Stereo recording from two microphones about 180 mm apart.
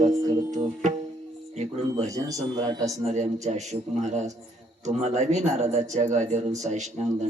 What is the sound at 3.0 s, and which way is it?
Speech, 40° right (ahead or behind).